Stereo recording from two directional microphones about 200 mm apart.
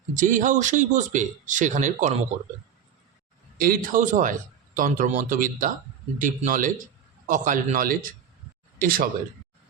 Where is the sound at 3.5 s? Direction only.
45° right (ahead or behind).